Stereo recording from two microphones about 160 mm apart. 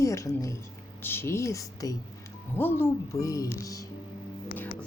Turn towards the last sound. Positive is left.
turn(degrees=20)  # may be behind; listen again after turning